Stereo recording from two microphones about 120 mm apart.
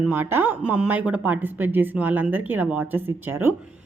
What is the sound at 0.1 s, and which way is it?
A woman's voice, 20° right (ahead or behind).